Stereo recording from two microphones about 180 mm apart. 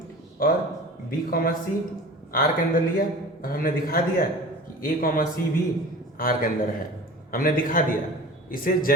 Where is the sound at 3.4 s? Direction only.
55° left (ahead or behind).